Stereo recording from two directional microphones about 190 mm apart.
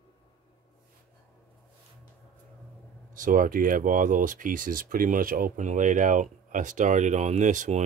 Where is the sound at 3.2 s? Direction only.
45° right (ahead or behind).